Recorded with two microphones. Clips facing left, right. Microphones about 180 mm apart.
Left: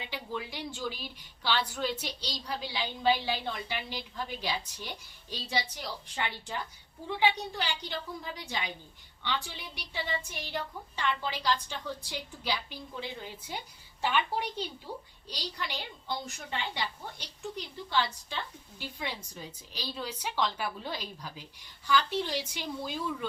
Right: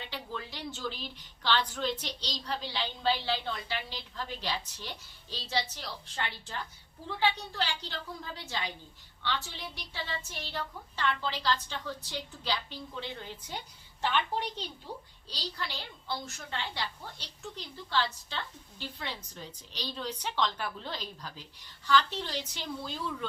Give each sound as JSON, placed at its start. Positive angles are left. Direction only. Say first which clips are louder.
{"t": 0.0, "sound": "a woman's voice", "louder": "left 2 dB", "side_deg": 10}